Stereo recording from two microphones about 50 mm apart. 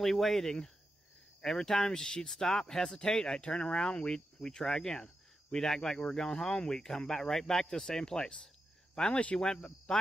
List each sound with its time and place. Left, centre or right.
0.0 s speech: centre